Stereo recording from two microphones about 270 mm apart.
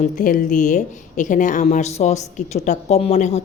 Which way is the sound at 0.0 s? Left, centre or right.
Left.